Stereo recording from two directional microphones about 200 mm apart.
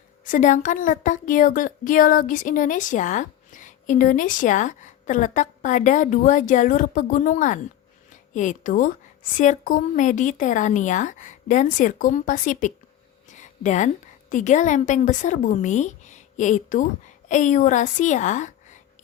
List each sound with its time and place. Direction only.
0.3 s a woman's voice: 40° left (ahead or behind)